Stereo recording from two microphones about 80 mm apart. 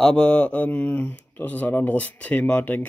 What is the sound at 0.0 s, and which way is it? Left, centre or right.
Speech, centre.